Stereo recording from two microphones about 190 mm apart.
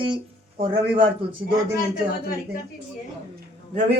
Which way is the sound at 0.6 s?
30° right (ahead or behind).